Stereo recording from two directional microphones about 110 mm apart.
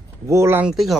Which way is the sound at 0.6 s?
Centre (ahead or behind).